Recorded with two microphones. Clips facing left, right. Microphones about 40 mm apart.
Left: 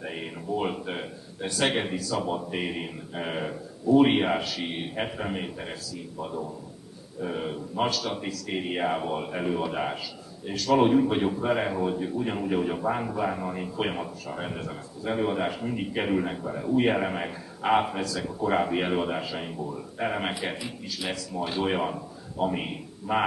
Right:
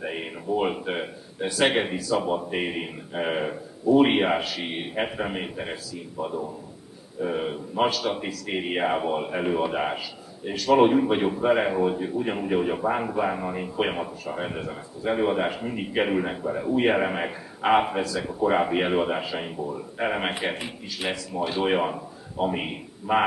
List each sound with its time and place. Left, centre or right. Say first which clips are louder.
0.0 s a man's voice: right 3 dB; right
20.5 s a man's voice: right 1 dB; right
21.1 s a man's voice: right 3 dB; right